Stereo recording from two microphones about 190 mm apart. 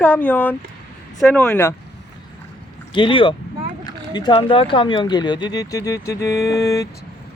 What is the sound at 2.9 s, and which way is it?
Speech, 25° left (ahead or behind).